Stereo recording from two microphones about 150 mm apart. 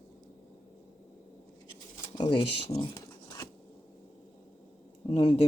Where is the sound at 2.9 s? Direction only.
25° left (ahead or behind).